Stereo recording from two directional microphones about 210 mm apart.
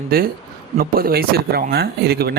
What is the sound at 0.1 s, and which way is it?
Speech, 45° right (ahead or behind).